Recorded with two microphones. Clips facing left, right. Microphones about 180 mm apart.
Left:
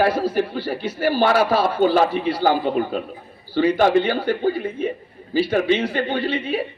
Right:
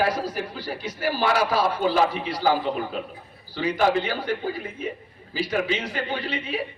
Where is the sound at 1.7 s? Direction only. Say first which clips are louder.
Left 6 dB; 60° left (ahead or behind).